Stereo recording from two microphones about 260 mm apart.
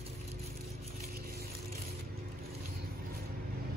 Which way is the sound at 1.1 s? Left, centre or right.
Right.